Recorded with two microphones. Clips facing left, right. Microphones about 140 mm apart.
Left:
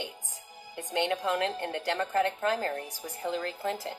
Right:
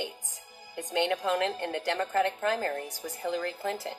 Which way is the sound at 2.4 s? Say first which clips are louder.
Even; 25° left (ahead or behind).